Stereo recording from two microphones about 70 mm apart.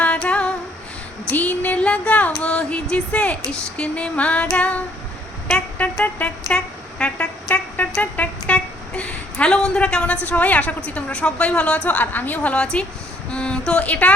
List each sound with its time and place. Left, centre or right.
0.0 s female singing: centre
1.3 s music: left
2.9 s speech: centre
4.5 s music: centre
7.0 s vehicle: centre
8.1 s speech: left